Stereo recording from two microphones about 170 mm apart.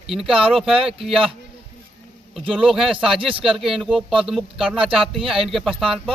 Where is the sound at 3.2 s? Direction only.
30° right (ahead or behind).